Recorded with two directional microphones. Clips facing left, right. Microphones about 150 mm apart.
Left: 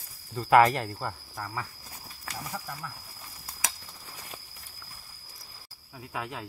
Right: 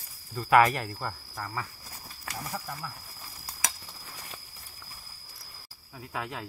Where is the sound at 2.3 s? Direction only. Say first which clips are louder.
Right 1 dB; 10° right (ahead or behind).